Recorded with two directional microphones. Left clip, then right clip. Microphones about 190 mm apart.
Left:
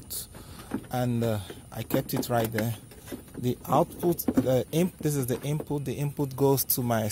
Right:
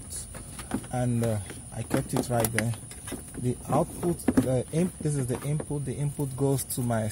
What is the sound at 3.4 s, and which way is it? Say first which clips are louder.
Speech: left 3 dB; 25° left (ahead or behind).